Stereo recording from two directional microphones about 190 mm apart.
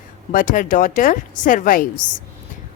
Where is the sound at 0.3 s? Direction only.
45° left (ahead or behind).